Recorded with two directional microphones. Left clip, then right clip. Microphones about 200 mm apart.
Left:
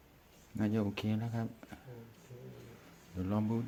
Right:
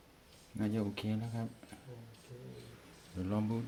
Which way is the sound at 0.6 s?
25° left (ahead or behind).